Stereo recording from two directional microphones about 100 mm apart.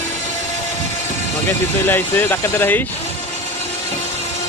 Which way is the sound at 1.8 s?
20° left (ahead or behind).